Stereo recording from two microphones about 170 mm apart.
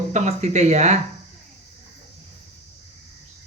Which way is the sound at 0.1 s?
45° right (ahead or behind).